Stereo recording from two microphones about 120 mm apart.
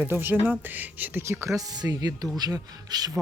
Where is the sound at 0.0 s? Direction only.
15° right (ahead or behind).